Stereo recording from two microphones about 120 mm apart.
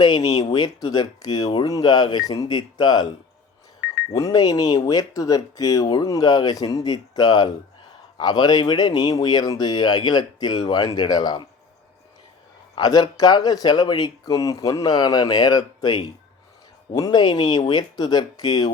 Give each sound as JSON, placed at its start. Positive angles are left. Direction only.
{"t": 0.5, "sound": "speech", "side_deg": 35}
{"t": 4.1, "sound": "speech", "side_deg": 30}
{"t": 12.7, "sound": "speech", "side_deg": 35}